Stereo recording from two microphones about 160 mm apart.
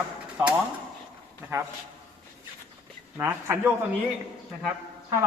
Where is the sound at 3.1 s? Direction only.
15° right (ahead or behind).